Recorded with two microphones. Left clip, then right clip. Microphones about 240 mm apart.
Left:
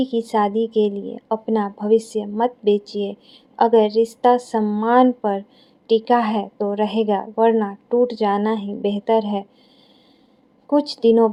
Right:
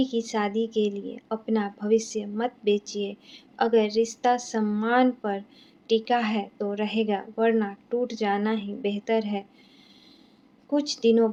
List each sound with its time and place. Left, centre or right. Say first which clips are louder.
0.0 s a woman's voice: left 7 dB; left
10.7 s a woman's voice: left 7 dB; left